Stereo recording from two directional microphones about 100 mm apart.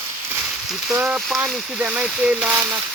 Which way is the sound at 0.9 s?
15° right (ahead or behind).